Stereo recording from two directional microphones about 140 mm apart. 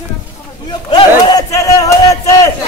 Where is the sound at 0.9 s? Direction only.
35° left (ahead or behind).